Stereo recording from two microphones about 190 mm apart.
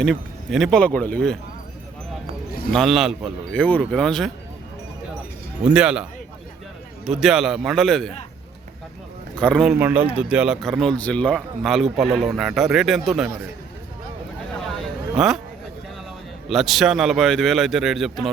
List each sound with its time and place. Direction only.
0.0 s a man's voice: centre (ahead or behind)
2.7 s a man's voice: centre (ahead or behind)
5.6 s a man's voice: 5° right (ahead or behind)
9.4 s a man's voice: centre (ahead or behind)
14.7 s a sound: centre (ahead or behind)
16.5 s a man's voice: centre (ahead or behind)